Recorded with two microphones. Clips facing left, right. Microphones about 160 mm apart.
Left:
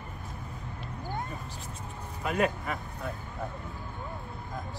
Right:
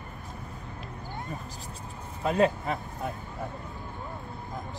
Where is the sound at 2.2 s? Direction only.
30° right (ahead or behind).